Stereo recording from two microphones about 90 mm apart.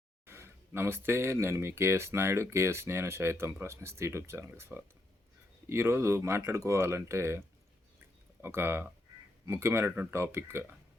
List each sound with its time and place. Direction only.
0.3 s speech: 25° right (ahead or behind)